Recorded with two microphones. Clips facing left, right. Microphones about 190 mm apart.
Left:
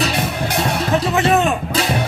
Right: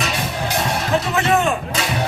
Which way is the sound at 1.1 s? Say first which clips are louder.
Left 2 dB; 20° left (ahead or behind).